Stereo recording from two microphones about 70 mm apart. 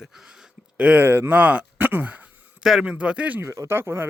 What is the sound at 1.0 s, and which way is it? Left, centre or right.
Speech, right.